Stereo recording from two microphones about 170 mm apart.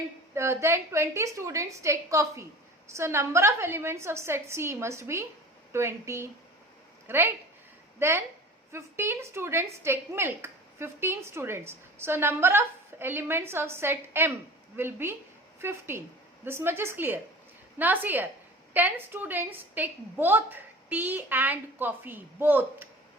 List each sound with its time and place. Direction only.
0.3 s a woman's voice: 15° right (ahead or behind)